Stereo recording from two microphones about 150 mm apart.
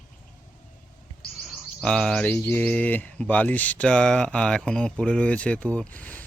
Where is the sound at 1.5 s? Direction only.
5° left (ahead or behind).